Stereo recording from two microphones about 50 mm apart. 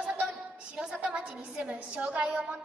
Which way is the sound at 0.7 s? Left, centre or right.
Right.